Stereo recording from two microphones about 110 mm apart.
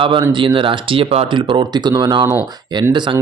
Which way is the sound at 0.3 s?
50° right (ahead or behind).